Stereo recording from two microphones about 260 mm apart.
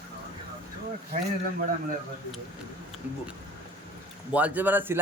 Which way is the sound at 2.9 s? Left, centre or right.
Centre.